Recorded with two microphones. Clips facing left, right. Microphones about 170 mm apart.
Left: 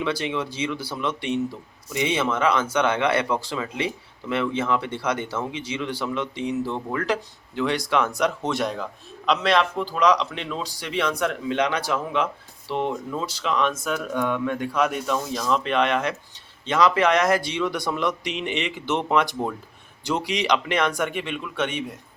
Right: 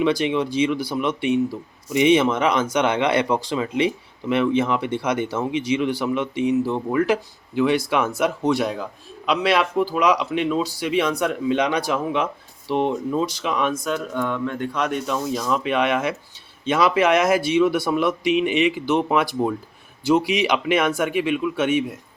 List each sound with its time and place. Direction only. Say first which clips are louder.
0.0 s speech: right 6 dB; 15° right (ahead or behind)
1.9 s a man's voice: right 7 dB; 20° right (ahead or behind)
13.7 s speech: right 1 dB; 5° left (ahead or behind)